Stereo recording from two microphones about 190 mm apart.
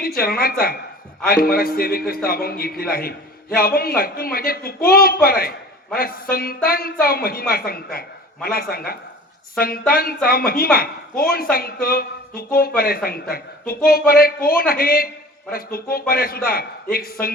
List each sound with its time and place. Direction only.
0.0 s a man's voice: 50° left (ahead or behind)